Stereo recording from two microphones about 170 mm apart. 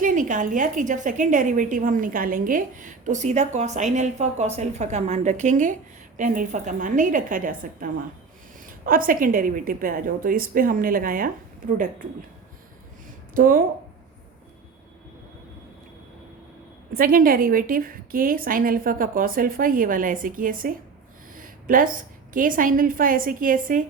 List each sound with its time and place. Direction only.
0.0 s a woman's voice: 50° right (ahead or behind)
8.9 s a woman's voice: 55° right (ahead or behind)
13.3 s a woman's voice: 55° right (ahead or behind)
16.9 s a woman's voice: 60° right (ahead or behind)